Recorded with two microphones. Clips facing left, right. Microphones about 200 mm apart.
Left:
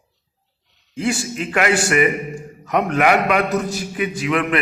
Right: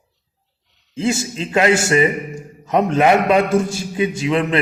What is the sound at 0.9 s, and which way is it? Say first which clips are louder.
A man's voice: right 2 dB; 25° right (ahead or behind).